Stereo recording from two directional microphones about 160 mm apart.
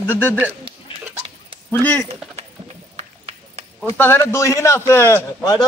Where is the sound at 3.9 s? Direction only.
15° left (ahead or behind).